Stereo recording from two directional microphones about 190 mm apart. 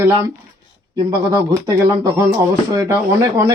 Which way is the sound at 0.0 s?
15° right (ahead or behind).